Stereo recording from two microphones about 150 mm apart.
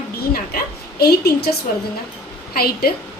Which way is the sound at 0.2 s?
90° left.